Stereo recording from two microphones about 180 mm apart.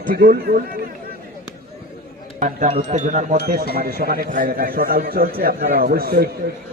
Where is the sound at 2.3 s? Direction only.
45° right (ahead or behind).